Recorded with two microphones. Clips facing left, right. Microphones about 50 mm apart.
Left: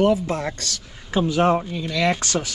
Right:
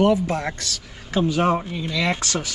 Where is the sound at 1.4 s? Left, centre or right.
Right.